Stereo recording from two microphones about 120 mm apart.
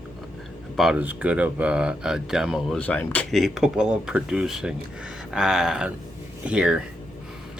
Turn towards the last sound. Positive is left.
turn(degrees=-5)  # may be behind; listen again after turning